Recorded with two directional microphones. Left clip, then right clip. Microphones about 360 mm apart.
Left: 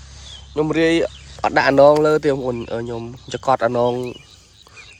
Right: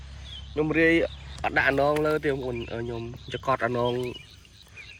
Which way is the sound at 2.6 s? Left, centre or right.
Centre.